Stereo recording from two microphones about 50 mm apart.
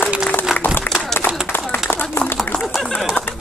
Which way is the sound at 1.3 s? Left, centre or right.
Right.